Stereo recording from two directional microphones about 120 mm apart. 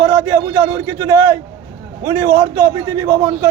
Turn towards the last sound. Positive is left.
turn(degrees=-25)  # may be behind; listen again after turning